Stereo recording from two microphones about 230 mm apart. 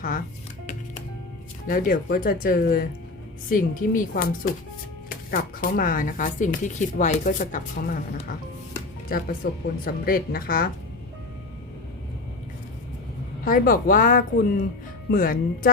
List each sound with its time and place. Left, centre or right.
1.6 s speech: left
13.4 s speech: left